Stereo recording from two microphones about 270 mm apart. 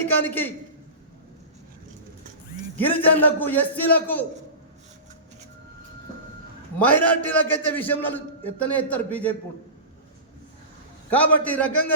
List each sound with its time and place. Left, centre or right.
0.0 s a man's voice: centre
2.7 s a man's voice: centre
6.7 s a man's voice: centre
11.1 s speech: centre